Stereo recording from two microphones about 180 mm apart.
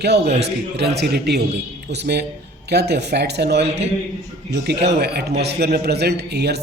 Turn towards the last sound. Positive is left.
turn(degrees=-65)  # may be behind; listen again after turning